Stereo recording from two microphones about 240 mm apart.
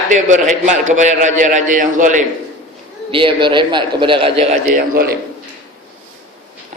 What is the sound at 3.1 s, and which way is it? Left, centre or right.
A man's voice, right.